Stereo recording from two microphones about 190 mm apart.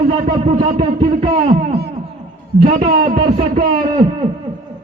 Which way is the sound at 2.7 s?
45° right (ahead or behind).